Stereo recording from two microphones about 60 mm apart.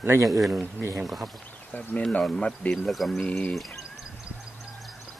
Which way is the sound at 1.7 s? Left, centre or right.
Left.